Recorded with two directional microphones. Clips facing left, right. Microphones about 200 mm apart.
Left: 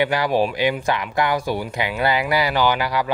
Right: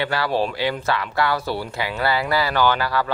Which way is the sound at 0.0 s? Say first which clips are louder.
Left 3 dB; 15° left (ahead or behind).